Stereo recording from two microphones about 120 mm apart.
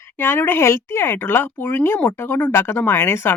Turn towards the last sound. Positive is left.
turn(degrees=20)  # may be behind; listen again after turning